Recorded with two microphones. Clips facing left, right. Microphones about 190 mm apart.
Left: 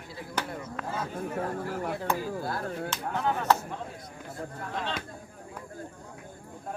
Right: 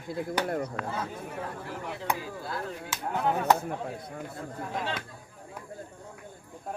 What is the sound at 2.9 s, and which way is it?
Speech, 10° right (ahead or behind).